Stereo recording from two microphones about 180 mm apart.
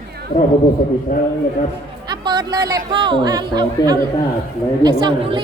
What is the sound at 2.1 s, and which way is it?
Speech, 25° right (ahead or behind).